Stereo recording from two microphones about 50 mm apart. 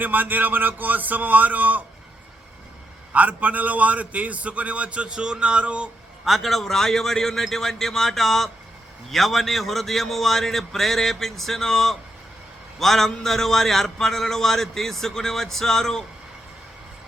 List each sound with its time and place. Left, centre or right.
0.0 s a sound: right
3.1 s a man's voice: right
6.2 s a man's voice: centre